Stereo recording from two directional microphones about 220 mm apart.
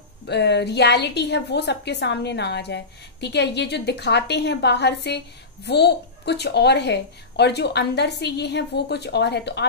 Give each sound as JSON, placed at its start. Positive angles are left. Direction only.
{"t": 0.3, "sound": "a woman's voice", "side_deg": 50}